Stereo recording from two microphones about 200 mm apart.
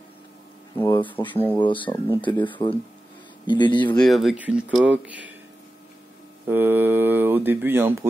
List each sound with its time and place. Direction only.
0.7 s speech: 10° left (ahead or behind)
1.6 s speech: 25° left (ahead or behind)
4.0 s speech: centre (ahead or behind)
6.4 s speech: 10° right (ahead or behind)